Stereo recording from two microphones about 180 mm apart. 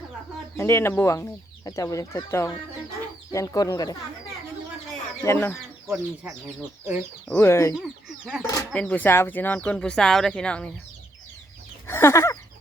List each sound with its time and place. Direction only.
0.5 s speech: 15° left (ahead or behind)
5.2 s speech: 10° left (ahead or behind)
5.9 s speech: 5° right (ahead or behind)
7.3 s speech: 15° left (ahead or behind)
8.0 s speech: centre (ahead or behind)
8.4 s speech: 10° left (ahead or behind)
11.9 s speech: 15° left (ahead or behind)